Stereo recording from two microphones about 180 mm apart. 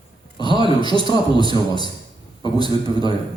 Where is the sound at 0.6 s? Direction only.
25° left (ahead or behind).